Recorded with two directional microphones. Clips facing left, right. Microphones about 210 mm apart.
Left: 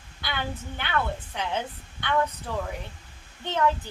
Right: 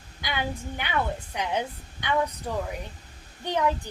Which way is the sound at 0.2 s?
15° right (ahead or behind).